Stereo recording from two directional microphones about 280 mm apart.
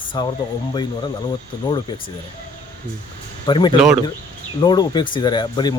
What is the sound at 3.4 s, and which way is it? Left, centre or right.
Speech, centre.